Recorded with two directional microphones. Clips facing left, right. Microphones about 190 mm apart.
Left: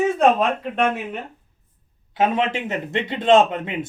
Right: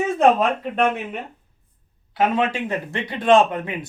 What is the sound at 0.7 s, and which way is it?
Speech, centre (ahead or behind).